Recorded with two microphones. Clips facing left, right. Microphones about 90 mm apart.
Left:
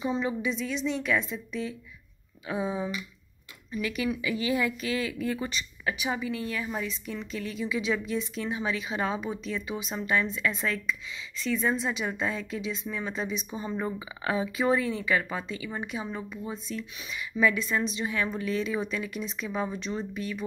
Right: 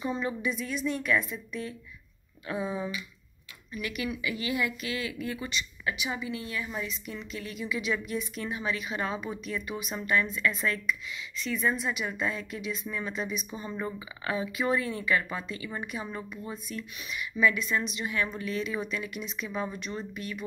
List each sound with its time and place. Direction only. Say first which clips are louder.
0.0 s a woman's voice: left 2 dB; 20° left (ahead or behind)
2.4 s a woman's voice: left 2 dB; 20° left (ahead or behind)
16.5 s a woman's voice: left 2 dB; 25° left (ahead or behind)